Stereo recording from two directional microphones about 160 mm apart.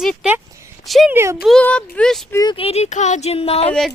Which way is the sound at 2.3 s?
25° left (ahead or behind).